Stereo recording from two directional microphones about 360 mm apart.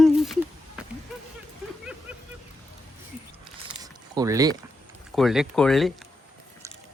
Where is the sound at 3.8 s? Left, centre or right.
Centre.